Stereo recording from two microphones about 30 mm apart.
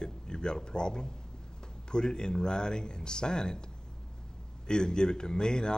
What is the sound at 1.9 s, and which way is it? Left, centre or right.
Speech, left.